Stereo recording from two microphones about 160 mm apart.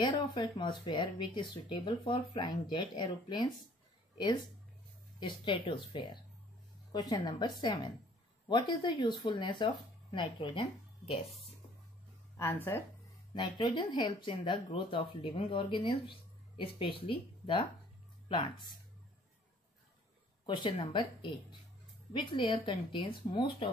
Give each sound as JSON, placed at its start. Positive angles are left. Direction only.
{"t": 0.0, "sound": "a woman's voice", "side_deg": 30}
{"t": 12.4, "sound": "speech", "side_deg": 15}
{"t": 13.3, "sound": "speech", "side_deg": 30}
{"t": 20.4, "sound": "speech", "side_deg": 30}